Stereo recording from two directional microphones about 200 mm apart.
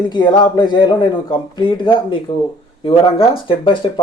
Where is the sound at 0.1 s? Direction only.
20° left (ahead or behind).